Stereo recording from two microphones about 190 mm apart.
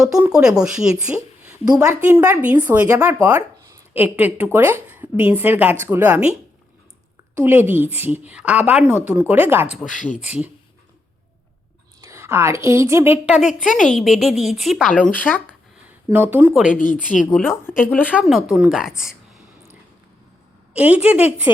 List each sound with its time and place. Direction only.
0.0 s a woman's voice: 5° right (ahead or behind)
7.3 s a woman's voice: 10° right (ahead or behind)
10.1 s speech: 35° left (ahead or behind)
11.9 s a woman's voice: 15° right (ahead or behind); by 15.4 s 10° left (ahead or behind)
16.0 s a woman's voice: 10° right (ahead or behind)
16.7 s speech: 45° left (ahead or behind)
17.3 s a woman's voice: centre (ahead or behind)
17.6 s speech: 10° left (ahead or behind)
18.1 s a woman's voice: centre (ahead or behind)
20.7 s a woman's voice: 10° right (ahead or behind)